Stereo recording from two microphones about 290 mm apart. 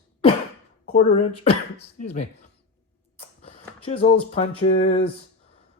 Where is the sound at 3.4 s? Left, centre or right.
Centre.